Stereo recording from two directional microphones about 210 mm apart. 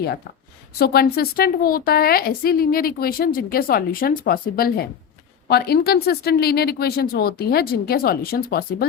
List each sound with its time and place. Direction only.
0.8 s a woman's voice: 50° left (ahead or behind)